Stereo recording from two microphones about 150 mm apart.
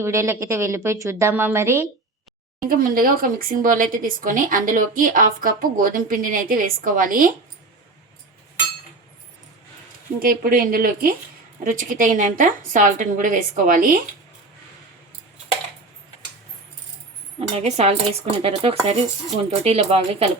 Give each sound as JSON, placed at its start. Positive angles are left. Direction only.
{"t": 0.0, "sound": "a woman's voice", "side_deg": -20}
{"t": 2.6, "sound": "speech", "side_deg": -70}
{"t": 10.2, "sound": "a woman's voice", "side_deg": -75}
{"t": 17.5, "sound": "speech", "side_deg": -45}